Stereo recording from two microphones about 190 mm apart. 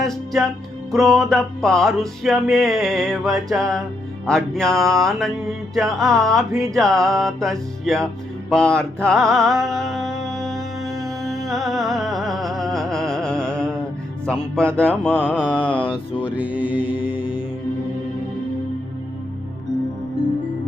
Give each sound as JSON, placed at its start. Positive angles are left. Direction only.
{"t": 0.0, "sound": "music", "side_deg": 0}
{"t": 14.8, "sound": "mantra", "side_deg": 5}
{"t": 15.8, "sound": "mantra", "side_deg": 25}
{"t": 16.4, "sound": "mantra", "side_deg": -5}
{"t": 16.6, "sound": "mantra", "side_deg": 25}